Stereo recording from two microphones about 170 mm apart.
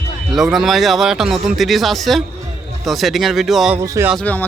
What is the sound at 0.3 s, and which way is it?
Speech, centre (ahead or behind).